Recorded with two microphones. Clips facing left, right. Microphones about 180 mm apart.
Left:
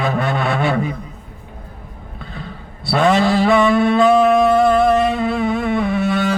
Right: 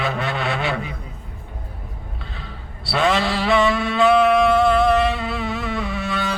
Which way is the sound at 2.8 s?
50° left (ahead or behind).